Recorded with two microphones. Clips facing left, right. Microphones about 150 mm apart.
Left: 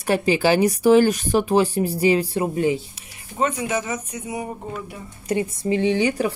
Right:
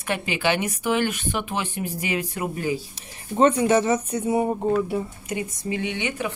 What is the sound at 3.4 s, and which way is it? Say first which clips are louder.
Speech: right 5 dB; 30° right (ahead or behind).